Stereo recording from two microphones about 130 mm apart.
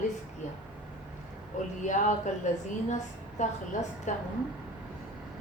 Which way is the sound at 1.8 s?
70° left (ahead or behind).